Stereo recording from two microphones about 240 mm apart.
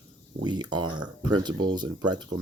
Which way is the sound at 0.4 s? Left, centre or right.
Centre.